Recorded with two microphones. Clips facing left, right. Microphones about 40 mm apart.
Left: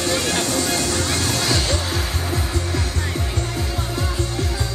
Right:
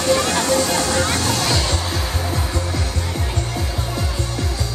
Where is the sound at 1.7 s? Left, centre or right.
Left.